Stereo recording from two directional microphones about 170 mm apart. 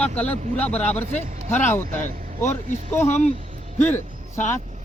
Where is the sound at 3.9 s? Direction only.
15° left (ahead or behind).